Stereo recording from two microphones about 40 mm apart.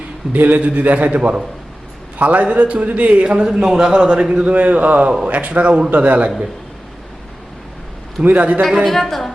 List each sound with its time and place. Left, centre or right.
0.3 s a man's voice: right
0.6 s a man's voice: right
3.4 s a man's voice: centre; by 6.3 s right
8.2 s a man's voice: right
8.8 s a woman's voice: centre